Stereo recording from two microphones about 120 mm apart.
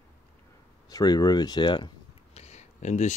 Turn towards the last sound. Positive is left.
turn(degrees=75)  # may be behind; listen again after turning